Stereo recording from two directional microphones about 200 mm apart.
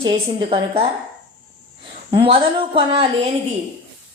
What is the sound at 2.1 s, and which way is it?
A woman's voice, 25° right (ahead or behind).